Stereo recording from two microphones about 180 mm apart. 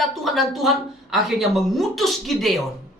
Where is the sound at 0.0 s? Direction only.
Centre (ahead or behind).